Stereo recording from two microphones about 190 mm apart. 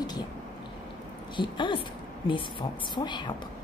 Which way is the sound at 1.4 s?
25° left (ahead or behind).